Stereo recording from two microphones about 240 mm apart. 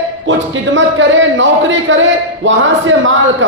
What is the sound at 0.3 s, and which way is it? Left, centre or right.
A man's voice, right.